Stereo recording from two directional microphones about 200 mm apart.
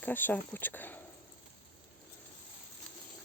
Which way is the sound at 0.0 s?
10° left (ahead or behind).